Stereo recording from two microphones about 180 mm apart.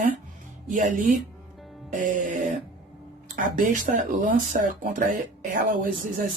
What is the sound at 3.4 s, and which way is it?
Speech, 50° right (ahead or behind).